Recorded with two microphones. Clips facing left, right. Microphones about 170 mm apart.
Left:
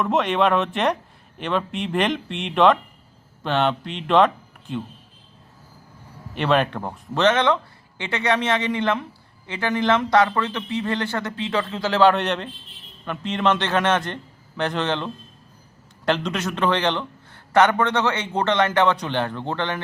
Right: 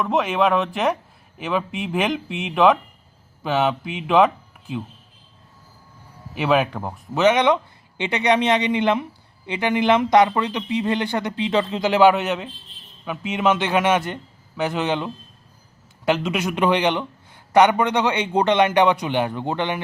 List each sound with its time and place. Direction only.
0.0 s speech: centre (ahead or behind)
6.3 s a man's voice: 5° right (ahead or behind)